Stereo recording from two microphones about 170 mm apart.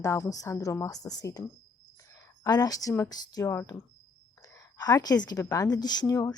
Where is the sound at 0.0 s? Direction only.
20° left (ahead or behind).